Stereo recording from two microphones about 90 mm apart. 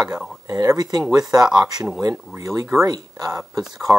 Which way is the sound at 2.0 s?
40° right (ahead or behind).